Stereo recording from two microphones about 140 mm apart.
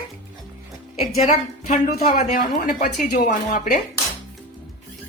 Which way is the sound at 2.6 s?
90° left.